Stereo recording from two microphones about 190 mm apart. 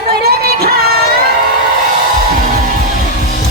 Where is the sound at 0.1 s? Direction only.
55° right (ahead or behind).